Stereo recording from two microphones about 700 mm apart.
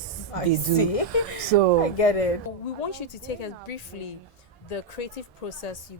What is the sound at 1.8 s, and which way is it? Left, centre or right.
Speech, left.